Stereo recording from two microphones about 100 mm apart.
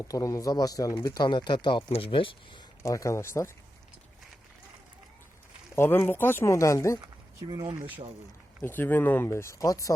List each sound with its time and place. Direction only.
0.0 s speech: 35° left (ahead or behind)
1.9 s speech: 65° left (ahead or behind)
2.8 s speech: 30° left (ahead or behind)
5.7 s speech: 25° left (ahead or behind)
7.0 s speech: 40° right (ahead or behind)
7.8 s speech: 15° right (ahead or behind)
8.6 s speech: 20° left (ahead or behind)